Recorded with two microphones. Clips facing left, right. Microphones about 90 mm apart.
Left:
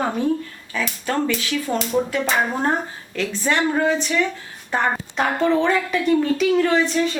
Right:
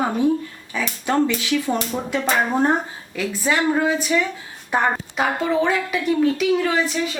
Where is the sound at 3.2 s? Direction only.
5° right (ahead or behind).